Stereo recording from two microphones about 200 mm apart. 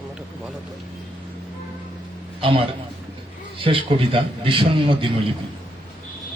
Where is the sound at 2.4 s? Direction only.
25° right (ahead or behind).